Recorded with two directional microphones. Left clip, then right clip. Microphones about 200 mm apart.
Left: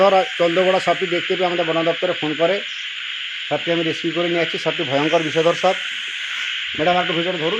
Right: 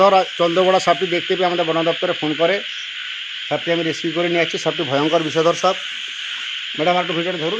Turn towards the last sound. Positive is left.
turn(degrees=5)  # may be behind; listen again after turning